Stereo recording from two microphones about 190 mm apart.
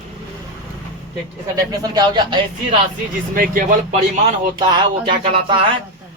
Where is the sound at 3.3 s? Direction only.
45° right (ahead or behind).